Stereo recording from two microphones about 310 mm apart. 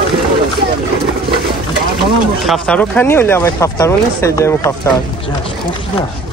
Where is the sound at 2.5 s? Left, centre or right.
Centre.